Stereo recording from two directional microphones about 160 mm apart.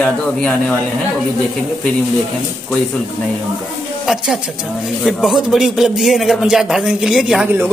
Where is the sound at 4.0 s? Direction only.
Centre (ahead or behind).